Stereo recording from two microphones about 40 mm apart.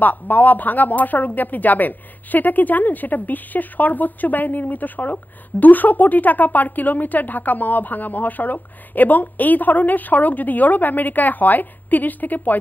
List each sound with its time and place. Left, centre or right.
0.0 s speech: left